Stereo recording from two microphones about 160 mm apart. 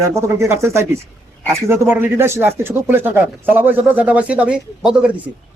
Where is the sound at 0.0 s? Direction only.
20° right (ahead or behind).